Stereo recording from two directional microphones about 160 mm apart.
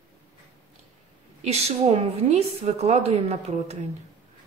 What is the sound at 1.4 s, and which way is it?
A woman's voice, 40° right (ahead or behind).